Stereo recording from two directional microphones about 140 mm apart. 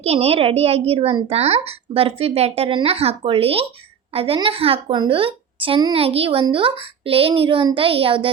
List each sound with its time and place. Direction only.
0.0 s a woman's voice: 45° right (ahead or behind)